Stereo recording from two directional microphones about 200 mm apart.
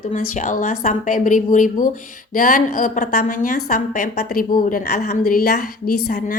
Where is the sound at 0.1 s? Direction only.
40° left (ahead or behind).